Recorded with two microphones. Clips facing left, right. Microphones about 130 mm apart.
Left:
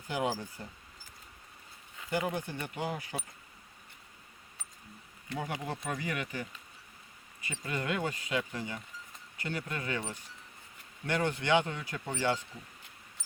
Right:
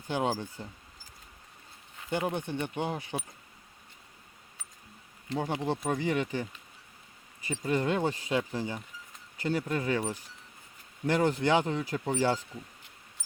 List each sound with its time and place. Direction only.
0.1 s speech: 30° right (ahead or behind)
2.0 s speech: 25° right (ahead or behind)
5.3 s speech: 30° right (ahead or behind)